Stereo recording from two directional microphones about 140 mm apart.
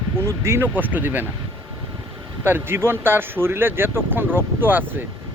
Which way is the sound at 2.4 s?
15° right (ahead or behind).